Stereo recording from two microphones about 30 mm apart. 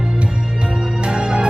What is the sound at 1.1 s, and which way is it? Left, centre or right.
Music, right.